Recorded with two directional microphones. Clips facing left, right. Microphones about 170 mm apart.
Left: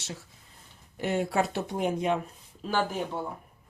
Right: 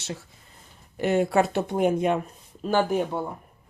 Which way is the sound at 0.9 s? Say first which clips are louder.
Right 6 dB; 65° right (ahead or behind).